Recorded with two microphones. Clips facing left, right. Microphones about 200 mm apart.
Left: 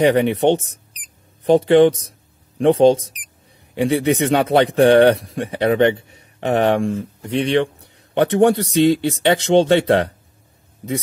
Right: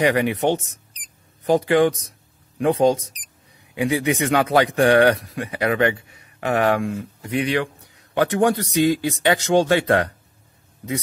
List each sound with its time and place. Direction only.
0.0 s speech: 25° left (ahead or behind)
3.7 s speech: 30° left (ahead or behind)